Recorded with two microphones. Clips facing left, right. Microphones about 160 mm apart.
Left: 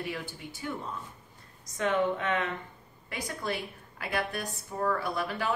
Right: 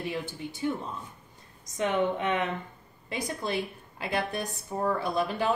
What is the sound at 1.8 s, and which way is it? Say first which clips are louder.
A woman's voice: right 1 dB; 20° right (ahead or behind).